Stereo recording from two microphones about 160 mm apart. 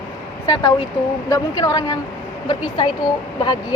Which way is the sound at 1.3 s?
25° left (ahead or behind).